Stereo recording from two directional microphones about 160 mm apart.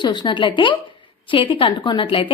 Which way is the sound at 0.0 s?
30° left (ahead or behind).